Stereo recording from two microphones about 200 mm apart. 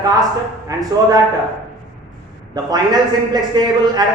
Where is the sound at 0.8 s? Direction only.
20° right (ahead or behind).